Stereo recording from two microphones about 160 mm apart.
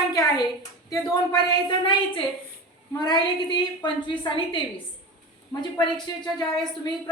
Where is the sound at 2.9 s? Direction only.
25° left (ahead or behind).